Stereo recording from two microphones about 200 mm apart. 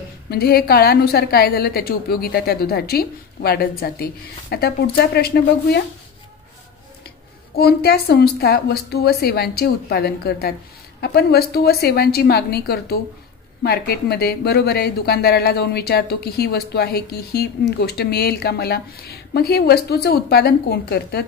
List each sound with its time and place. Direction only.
0.3 s speech: 50° left (ahead or behind)
7.5 s speech: 50° left (ahead or behind)